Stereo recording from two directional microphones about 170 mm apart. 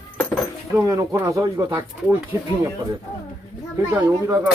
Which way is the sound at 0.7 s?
15° right (ahead or behind).